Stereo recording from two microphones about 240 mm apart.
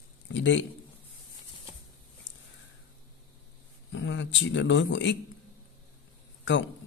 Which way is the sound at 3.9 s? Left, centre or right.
Left.